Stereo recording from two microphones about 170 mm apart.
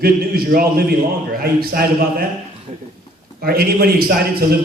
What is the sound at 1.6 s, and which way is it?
Speech, 60° right (ahead or behind).